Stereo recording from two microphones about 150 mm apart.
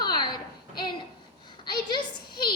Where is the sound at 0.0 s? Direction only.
30° left (ahead or behind).